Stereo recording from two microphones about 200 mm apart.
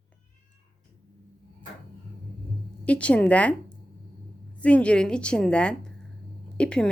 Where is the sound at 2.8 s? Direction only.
5° left (ahead or behind).